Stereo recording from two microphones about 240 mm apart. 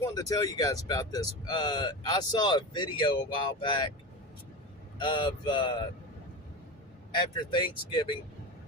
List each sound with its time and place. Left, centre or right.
0.0 s speech: centre
4.9 s speech: centre
7.5 s speech: centre